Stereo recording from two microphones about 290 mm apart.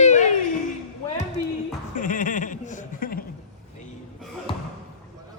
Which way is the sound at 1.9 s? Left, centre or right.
Left.